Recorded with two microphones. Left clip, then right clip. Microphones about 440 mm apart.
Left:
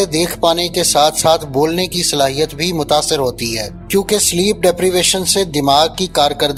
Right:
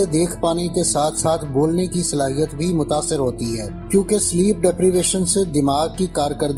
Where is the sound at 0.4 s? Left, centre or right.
Left.